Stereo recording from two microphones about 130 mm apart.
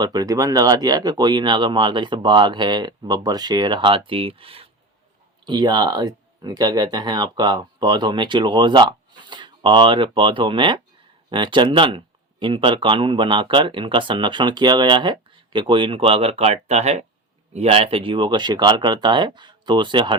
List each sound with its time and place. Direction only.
0.0 s speech: 30° right (ahead or behind); by 4.7 s 45° right (ahead or behind)
5.5 s speech: 35° right (ahead or behind)